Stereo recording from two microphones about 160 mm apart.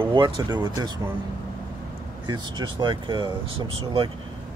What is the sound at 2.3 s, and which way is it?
Speech, 30° right (ahead or behind).